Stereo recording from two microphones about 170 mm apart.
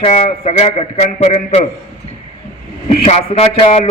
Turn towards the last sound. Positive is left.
turn(degrees=35)  # may be behind; listen again after turning